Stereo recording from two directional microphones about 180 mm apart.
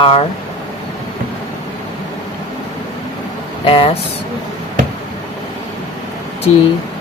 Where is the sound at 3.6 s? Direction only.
30° left (ahead or behind).